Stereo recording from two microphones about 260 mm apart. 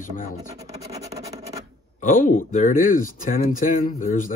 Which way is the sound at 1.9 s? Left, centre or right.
Left.